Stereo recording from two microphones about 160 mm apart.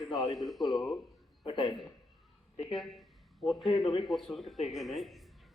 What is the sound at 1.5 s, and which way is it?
Speech, 25° left (ahead or behind).